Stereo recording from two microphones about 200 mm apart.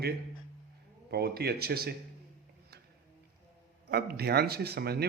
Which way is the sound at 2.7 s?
55° right (ahead or behind).